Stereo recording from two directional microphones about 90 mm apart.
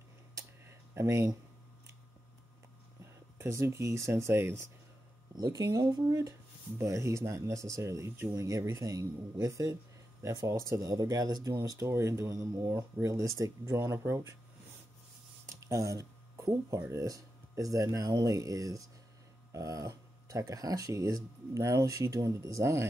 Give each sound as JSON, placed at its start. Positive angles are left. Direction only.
{"t": 0.3, "sound": "a sound", "side_deg": -35}
{"t": 3.3, "sound": "speech", "side_deg": -30}
{"t": 5.3, "sound": "speech", "side_deg": -45}
{"t": 11.9, "sound": "speech", "side_deg": -30}
{"t": 15.4, "sound": "a sound", "side_deg": -35}
{"t": 16.9, "sound": "speech", "side_deg": -40}